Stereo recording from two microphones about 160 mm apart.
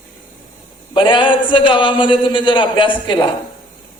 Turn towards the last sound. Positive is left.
turn(degrees=30)  # may be behind; listen again after turning